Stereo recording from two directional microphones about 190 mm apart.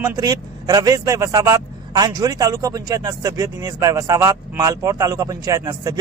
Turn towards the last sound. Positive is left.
turn(degrees=-20)  # may be behind; listen again after turning